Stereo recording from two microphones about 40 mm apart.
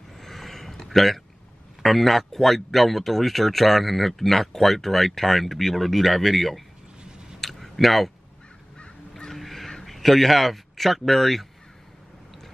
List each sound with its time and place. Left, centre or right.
0.1 s a sound: centre
1.8 s speech: centre
7.0 s a sound: centre
7.3 s clicking: centre
9.3 s crow: centre
9.8 s speech: centre